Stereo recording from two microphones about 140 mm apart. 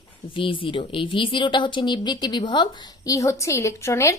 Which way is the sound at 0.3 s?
35° left (ahead or behind).